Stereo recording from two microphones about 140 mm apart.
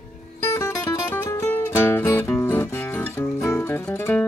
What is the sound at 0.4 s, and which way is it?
Music, 20° left (ahead or behind).